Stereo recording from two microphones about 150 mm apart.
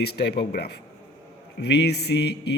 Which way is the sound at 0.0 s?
90° left.